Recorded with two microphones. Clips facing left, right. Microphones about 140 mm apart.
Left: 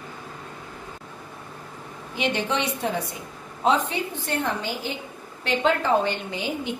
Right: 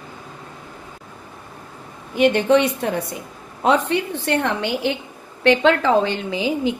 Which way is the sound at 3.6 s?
65° right (ahead or behind).